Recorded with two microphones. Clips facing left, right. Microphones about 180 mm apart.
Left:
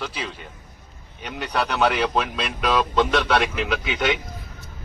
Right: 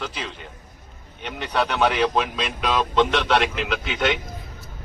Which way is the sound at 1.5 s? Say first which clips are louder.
Right 1 dB; centre (ahead or behind).